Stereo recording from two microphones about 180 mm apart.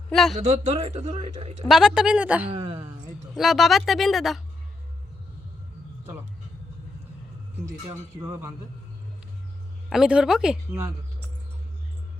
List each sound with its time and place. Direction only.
0.1 s speech: centre (ahead or behind)
0.3 s a man's voice: 40° right (ahead or behind)
1.6 s speech: 5° right (ahead or behind)
2.5 s speech: 30° right (ahead or behind)
3.3 s speech: centre (ahead or behind)
7.6 s speech: 15° right (ahead or behind)
9.9 s speech: 5° right (ahead or behind)